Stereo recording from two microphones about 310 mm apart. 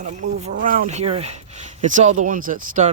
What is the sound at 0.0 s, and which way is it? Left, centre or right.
Speech, right.